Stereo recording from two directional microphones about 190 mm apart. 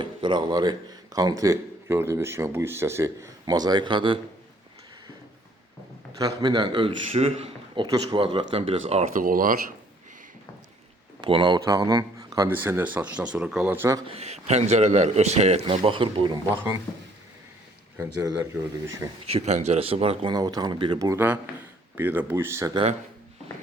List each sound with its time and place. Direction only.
0.0 s speech: 25° right (ahead or behind)
6.1 s speech: 20° right (ahead or behind)
8.9 s speech: 40° right (ahead or behind)
11.2 s speech: 25° right (ahead or behind)
14.1 s a man's voice: 35° right (ahead or behind)
19.2 s speech: 35° right (ahead or behind); by 22.8 s 15° right (ahead or behind)